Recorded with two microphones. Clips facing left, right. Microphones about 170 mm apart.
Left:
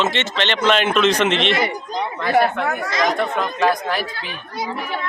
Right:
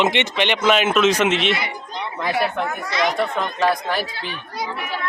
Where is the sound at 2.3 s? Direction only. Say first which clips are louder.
Left 7 dB; 50° left (ahead or behind).